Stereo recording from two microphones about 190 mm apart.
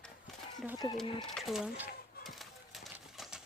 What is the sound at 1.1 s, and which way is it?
Speech, 25° left (ahead or behind).